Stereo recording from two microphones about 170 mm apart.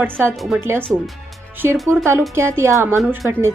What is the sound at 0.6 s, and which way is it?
Speech, 15° right (ahead or behind).